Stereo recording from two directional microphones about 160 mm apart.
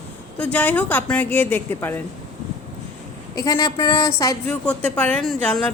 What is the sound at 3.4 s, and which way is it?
Speech, 25° left (ahead or behind).